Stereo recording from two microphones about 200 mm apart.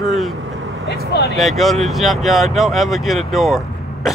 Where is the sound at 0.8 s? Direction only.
55° left (ahead or behind).